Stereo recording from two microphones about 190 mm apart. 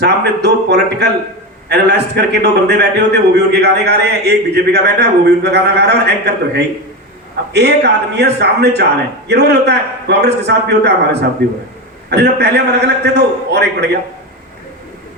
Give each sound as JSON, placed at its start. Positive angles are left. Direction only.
{"t": 0.0, "sound": "a man's voice", "side_deg": -60}